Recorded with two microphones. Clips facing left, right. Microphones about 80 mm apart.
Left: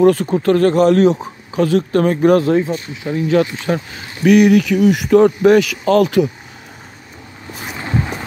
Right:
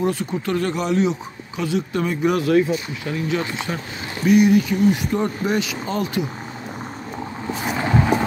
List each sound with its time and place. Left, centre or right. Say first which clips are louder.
0.0 s speech: left 10 dB; left
2.4 s speech: left 2 dB; left
3.7 s speech: left 9 dB; left
4.2 s speech: left 5 dB; left
7.7 s vehicle: right 3 dB; right